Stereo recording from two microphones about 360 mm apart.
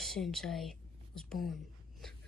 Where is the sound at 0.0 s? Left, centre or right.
Centre.